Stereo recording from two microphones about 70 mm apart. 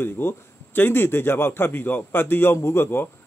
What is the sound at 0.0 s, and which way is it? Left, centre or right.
A man's voice, left.